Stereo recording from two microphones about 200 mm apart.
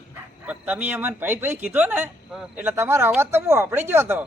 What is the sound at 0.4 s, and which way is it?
A man's voice, 5° right (ahead or behind).